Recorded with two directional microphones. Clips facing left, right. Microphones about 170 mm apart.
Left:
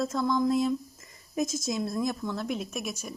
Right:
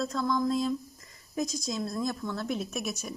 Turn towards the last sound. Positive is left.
turn(degrees=10)  # may be behind; listen again after turning